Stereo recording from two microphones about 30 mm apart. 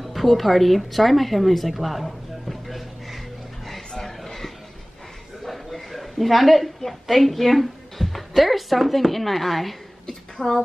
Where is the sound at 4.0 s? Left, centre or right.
Centre.